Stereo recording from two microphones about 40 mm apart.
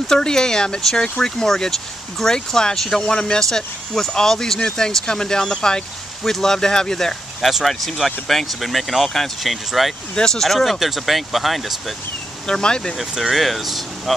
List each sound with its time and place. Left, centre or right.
0.1 s speech: centre
7.4 s speech: centre
10.1 s speech: centre
12.4 s speech: centre
13.1 s speech: centre